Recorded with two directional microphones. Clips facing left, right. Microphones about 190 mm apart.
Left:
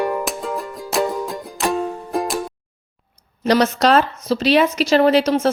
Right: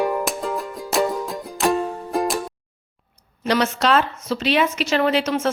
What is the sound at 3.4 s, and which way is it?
A woman's voice, 40° left (ahead or behind).